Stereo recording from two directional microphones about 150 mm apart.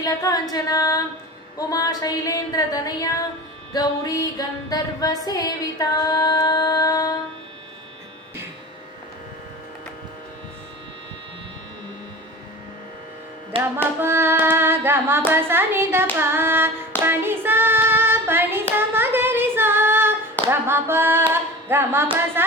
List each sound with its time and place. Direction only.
0.0 s a sound: 25° left (ahead or behind)
13.5 s music: 35° right (ahead or behind)
14.0 s a woman's voice: 15° right (ahead or behind)
17.0 s hands: 15° right (ahead or behind)
20.5 s a woman's voice: 15° right (ahead or behind)